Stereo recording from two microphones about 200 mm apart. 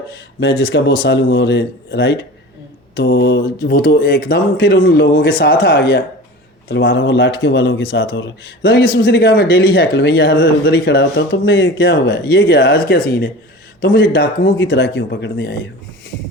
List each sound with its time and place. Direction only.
0.6 s a man's voice: 60° left (ahead or behind)